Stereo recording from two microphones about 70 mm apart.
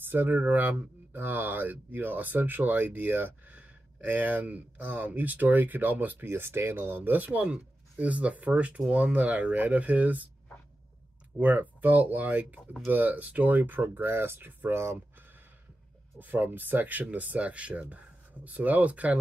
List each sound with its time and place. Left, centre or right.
0.0 s speech: right
11.3 s speech: right
16.2 s speech: right